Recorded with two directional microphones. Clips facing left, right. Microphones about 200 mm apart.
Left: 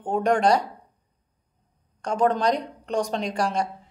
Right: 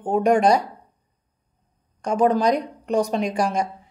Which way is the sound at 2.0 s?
10° right (ahead or behind).